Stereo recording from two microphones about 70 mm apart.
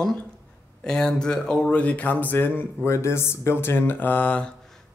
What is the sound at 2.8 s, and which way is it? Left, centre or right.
Speech, left.